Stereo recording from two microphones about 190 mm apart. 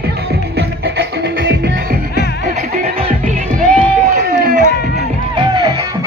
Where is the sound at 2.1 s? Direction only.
60° left (ahead or behind).